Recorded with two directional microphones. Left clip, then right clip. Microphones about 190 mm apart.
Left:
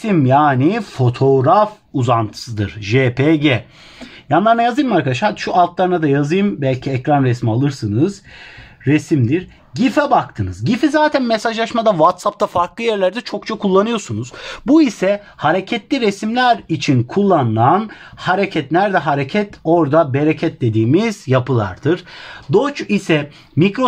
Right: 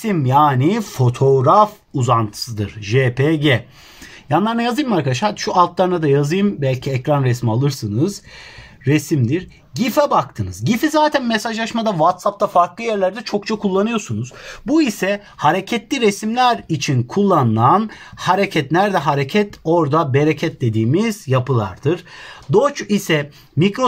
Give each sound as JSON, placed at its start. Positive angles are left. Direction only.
{"t": 0.0, "sound": "speech", "side_deg": 35}
{"t": 4.3, "sound": "speech", "side_deg": 40}